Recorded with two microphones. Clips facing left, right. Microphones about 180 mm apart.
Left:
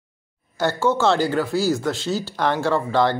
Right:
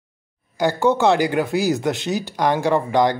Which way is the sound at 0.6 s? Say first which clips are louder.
Right 2 dB; 15° right (ahead or behind).